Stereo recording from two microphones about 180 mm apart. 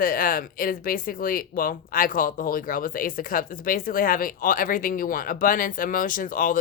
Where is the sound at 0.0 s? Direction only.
50° left (ahead or behind).